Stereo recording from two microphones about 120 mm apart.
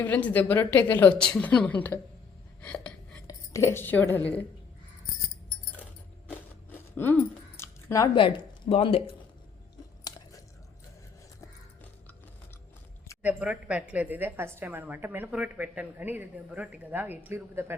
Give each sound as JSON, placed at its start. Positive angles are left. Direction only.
{"t": 0.0, "sound": "a woman's voice", "side_deg": 15}
{"t": 2.6, "sound": "a sound", "side_deg": 10}
{"t": 3.2, "sound": "speech", "side_deg": 20}
{"t": 6.7, "sound": "a sound", "side_deg": 15}
{"t": 8.1, "sound": "speech", "side_deg": 45}
{"t": 10.0, "sound": "chewing", "side_deg": 35}
{"t": 13.2, "sound": "a woman's voice", "side_deg": -10}